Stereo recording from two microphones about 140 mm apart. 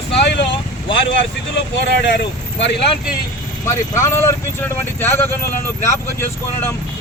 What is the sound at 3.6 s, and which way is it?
Speech, 20° left (ahead or behind).